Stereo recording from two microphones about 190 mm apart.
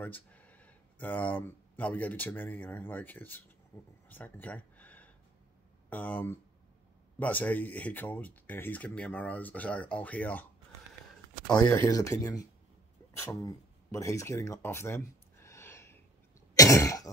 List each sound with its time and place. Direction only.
0.0 s speech: 10° left (ahead or behind)
4.1 s a sound: 10° left (ahead or behind)
5.9 s speech: 10° left (ahead or behind)
11.6 s speech: 15° left (ahead or behind)
16.5 s throat clearing: 15° left (ahead or behind)